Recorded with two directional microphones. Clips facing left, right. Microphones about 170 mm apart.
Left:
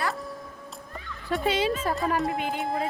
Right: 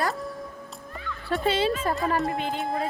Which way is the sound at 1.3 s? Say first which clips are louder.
Right 1 dB; 10° left (ahead or behind).